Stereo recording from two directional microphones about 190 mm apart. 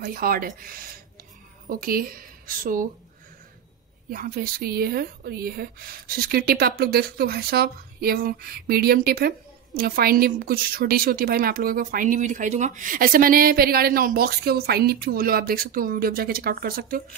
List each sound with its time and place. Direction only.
0.0 s a woman's voice: 50° right (ahead or behind)
4.1 s a woman's voice: 50° right (ahead or behind)